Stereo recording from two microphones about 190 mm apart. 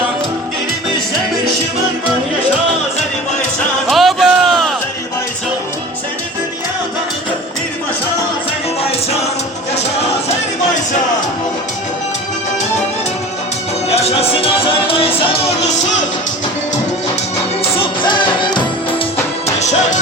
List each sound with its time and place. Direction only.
3.8 s a sound: centre (ahead or behind)
13.9 s music: 35° left (ahead or behind)
17.6 s music: 25° left (ahead or behind)
19.5 s music: 35° left (ahead or behind)